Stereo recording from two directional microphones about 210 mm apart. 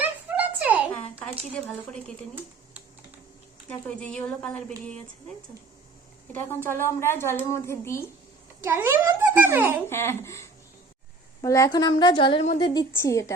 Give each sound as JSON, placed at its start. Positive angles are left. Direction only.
{"t": 0.0, "sound": "a sound", "side_deg": -10}
{"t": 0.9, "sound": "speech", "side_deg": 5}
{"t": 3.7, "sound": "speech", "side_deg": 5}
{"t": 6.3, "sound": "a woman's voice", "side_deg": 10}
{"t": 8.6, "sound": "a child's voice", "side_deg": -10}
{"t": 9.9, "sound": "a woman's voice", "side_deg": 10}